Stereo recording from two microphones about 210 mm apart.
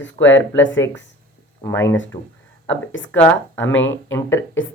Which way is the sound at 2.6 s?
65° left (ahead or behind).